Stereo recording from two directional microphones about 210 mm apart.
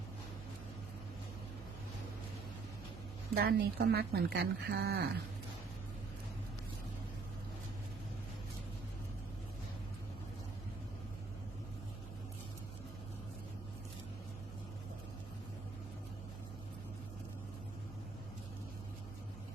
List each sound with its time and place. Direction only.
3.3 s speech: 50° right (ahead or behind)